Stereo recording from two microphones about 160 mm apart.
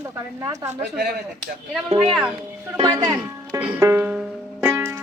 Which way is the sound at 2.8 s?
30° right (ahead or behind).